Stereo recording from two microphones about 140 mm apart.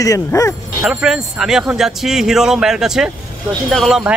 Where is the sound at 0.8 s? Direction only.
5° right (ahead or behind).